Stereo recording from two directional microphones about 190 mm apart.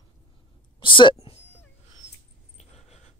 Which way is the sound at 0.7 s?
25° left (ahead or behind).